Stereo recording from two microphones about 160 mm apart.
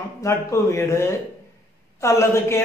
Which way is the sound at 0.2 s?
20° left (ahead or behind).